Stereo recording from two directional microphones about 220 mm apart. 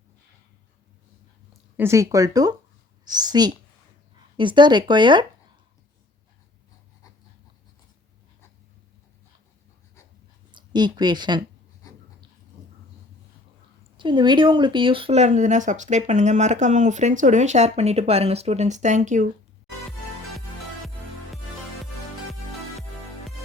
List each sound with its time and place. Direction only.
1.7 s a woman's voice: 10° right (ahead or behind)
10.5 s speech: 20° right (ahead or behind)
13.9 s speech: 20° right (ahead or behind)